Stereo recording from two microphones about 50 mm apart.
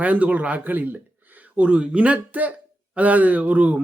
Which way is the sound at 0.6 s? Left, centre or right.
Right.